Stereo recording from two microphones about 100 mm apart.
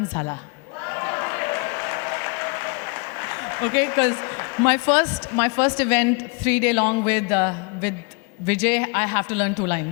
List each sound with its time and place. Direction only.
0.1 s a man's voice: 30° left (ahead or behind)
0.9 s applause: 25° left (ahead or behind)
8.4 s a man's voice: 20° left (ahead or behind)